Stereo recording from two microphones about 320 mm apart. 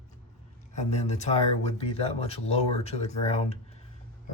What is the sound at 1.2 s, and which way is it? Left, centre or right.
Speech, centre.